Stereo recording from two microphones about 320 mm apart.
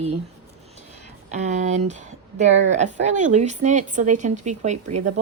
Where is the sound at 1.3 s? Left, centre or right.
Right.